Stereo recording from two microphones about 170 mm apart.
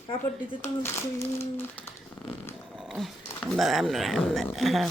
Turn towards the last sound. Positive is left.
turn(degrees=0)  # may be behind; listen again after turning